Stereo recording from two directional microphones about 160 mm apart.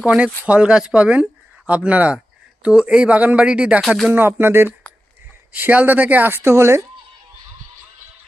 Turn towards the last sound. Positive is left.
turn(degrees=-15)  # may be behind; listen again after turning